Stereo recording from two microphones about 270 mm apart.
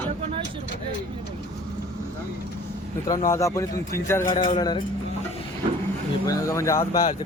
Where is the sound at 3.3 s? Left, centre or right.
Centre.